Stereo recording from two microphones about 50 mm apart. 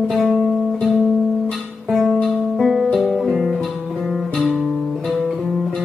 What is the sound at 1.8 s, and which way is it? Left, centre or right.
Music, centre.